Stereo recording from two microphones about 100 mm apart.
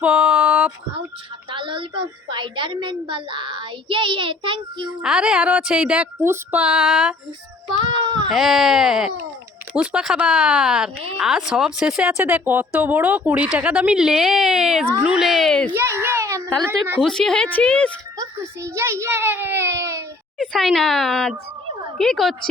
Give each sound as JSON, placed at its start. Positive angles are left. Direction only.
{"t": 0.0, "sound": "a sound", "side_deg": -10}
{"t": 1.5, "sound": "a woman's voice", "side_deg": -55}
{"t": 5.0, "sound": "a woman's voice", "side_deg": -10}
{"t": 6.2, "sound": "female singing", "side_deg": -25}
{"t": 6.6, "sound": "a woman's voice", "side_deg": -10}
{"t": 7.7, "sound": "speech", "side_deg": -45}
{"t": 8.3, "sound": "a woman's voice", "side_deg": 0}
{"t": 15.7, "sound": "a child's voice", "side_deg": -25}
{"t": 16.6, "sound": "female singing", "side_deg": -20}
{"t": 17.0, "sound": "a woman's voice", "side_deg": 5}
{"t": 18.2, "sound": "a child's voice", "side_deg": -30}
{"t": 20.4, "sound": "speech", "side_deg": 5}